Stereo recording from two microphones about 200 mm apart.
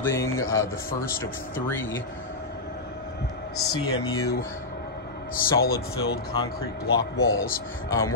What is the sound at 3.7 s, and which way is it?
Speech, 20° left (ahead or behind).